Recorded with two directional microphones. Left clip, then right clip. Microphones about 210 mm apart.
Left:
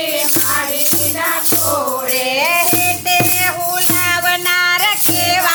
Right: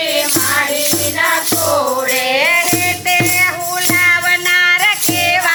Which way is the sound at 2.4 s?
10° left (ahead or behind).